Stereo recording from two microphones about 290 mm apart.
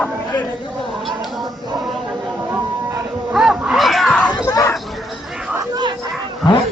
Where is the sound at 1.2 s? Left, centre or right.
Centre.